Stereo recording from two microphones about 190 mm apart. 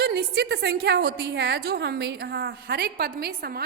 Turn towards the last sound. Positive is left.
turn(degrees=-55)  # may be behind; listen again after turning